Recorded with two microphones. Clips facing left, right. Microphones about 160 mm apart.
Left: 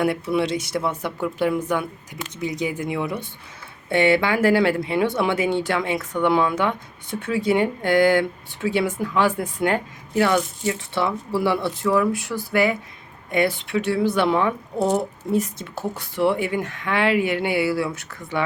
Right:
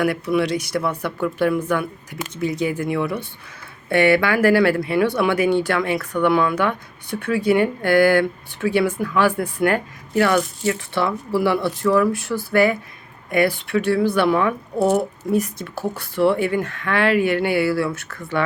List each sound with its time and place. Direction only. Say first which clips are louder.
0.0 s speech: right 2 dB; 25° left (ahead or behind)